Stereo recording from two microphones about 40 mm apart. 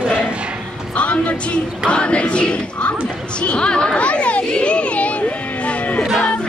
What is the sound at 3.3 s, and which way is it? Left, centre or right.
Children playing, left.